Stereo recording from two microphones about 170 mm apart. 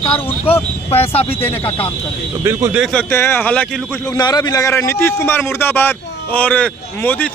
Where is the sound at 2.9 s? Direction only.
15° left (ahead or behind).